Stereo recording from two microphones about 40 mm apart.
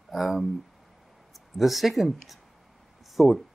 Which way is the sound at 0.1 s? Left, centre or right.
Centre.